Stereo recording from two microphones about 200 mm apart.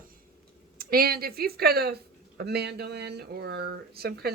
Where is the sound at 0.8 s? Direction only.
50° right (ahead or behind).